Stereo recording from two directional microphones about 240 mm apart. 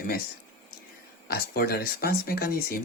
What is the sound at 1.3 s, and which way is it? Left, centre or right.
Speech, left.